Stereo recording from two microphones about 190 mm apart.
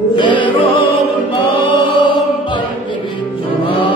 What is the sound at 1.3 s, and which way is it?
Choir, 25° left (ahead or behind).